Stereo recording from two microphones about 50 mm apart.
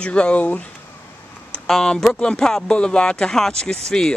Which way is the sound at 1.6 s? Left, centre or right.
Centre.